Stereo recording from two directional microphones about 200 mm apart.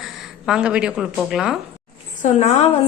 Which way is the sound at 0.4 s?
5° right (ahead or behind).